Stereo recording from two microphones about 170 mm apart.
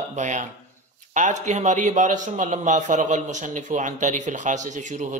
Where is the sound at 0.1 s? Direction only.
45° right (ahead or behind).